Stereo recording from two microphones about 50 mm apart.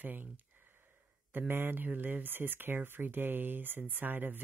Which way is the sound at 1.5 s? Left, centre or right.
Right.